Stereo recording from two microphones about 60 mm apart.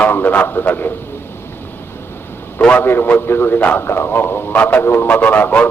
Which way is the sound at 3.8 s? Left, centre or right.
Left.